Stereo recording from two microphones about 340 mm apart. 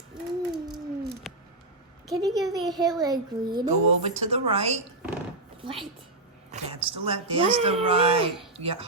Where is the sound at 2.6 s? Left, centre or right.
Centre.